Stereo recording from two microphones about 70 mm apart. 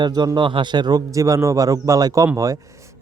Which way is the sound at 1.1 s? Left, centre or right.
Right.